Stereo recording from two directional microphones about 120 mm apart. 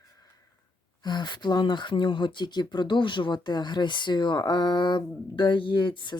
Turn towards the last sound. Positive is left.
turn(degrees=40)  # may be behind; listen again after turning